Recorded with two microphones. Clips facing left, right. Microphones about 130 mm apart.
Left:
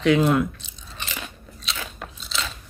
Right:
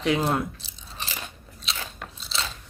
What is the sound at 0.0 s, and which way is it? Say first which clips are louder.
Chewing: left 5 dB; 30° right (ahead or behind).